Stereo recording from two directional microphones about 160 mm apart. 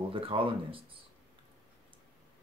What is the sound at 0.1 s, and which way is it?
Speech, 35° right (ahead or behind).